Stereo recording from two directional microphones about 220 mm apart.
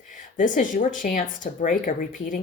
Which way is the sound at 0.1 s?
35° left (ahead or behind).